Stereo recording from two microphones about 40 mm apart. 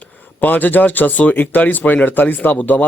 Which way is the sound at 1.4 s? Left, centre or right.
Left.